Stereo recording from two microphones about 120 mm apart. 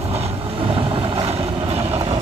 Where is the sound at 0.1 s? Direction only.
55° right (ahead or behind).